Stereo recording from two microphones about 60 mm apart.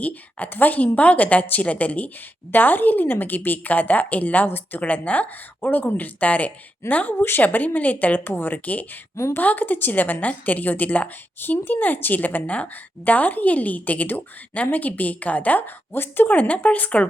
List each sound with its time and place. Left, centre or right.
0.0 s speech: left